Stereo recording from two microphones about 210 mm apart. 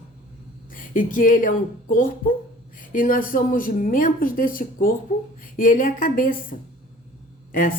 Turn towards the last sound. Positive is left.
turn(degrees=40)  # may be behind; listen again after turning